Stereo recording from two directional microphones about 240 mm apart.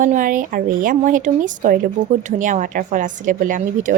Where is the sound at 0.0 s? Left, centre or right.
Right.